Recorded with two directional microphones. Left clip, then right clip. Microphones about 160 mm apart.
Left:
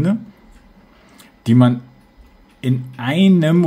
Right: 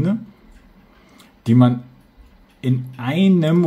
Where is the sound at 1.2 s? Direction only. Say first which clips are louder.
Left 1 dB; 15° left (ahead or behind).